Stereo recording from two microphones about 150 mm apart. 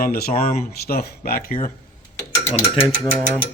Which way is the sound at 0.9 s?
90° left.